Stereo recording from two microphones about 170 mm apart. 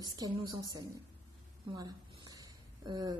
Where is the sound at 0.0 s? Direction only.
20° right (ahead or behind).